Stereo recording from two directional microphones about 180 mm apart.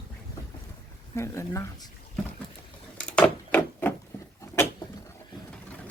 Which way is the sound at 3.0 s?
5° left (ahead or behind).